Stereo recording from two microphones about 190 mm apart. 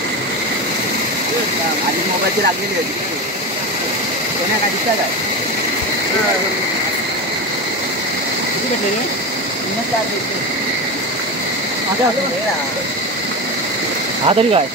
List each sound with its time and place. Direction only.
14.2 s speech: 30° right (ahead or behind)